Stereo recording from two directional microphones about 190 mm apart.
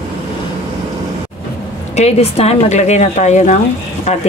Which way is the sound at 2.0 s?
35° left (ahead or behind).